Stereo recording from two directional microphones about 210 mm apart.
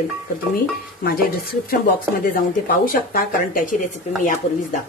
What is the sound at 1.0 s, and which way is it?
Speech, 45° left (ahead or behind).